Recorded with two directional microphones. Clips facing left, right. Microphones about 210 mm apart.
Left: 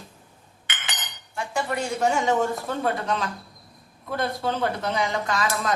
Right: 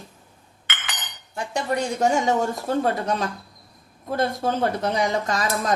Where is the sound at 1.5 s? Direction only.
40° right (ahead or behind).